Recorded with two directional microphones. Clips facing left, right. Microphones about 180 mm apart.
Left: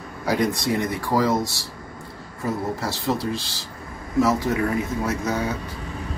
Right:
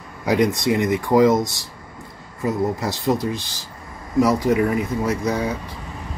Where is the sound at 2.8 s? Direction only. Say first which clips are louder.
Right 3 dB; 15° right (ahead or behind).